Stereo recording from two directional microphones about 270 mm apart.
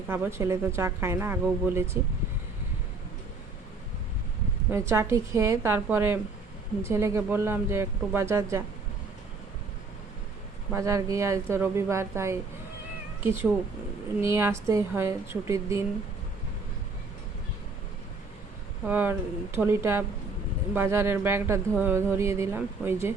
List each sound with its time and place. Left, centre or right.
0.1 s speech: centre
4.7 s speech: centre
10.7 s speech: centre
18.9 s speech: centre